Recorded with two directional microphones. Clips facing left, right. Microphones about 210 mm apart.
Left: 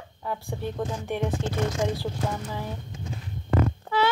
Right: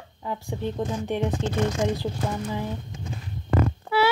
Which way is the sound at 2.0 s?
15° right (ahead or behind).